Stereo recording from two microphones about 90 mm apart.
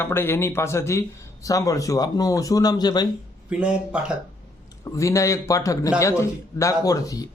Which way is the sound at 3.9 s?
15° right (ahead or behind).